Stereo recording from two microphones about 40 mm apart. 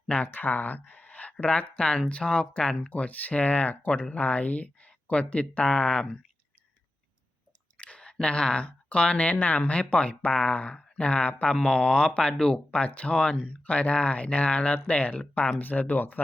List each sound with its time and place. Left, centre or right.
0.3 s speech: left
7.8 s speech: left
11.7 s speech: left
12.3 s speech: centre
12.7 s speech: left